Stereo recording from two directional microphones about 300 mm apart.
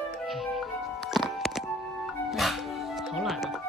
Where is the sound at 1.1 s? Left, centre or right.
Centre.